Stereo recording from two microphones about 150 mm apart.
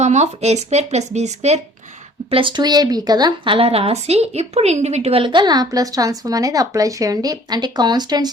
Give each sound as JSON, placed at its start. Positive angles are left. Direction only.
{"t": 0.0, "sound": "speech", "side_deg": -45}
{"t": 2.3, "sound": "speech", "side_deg": -35}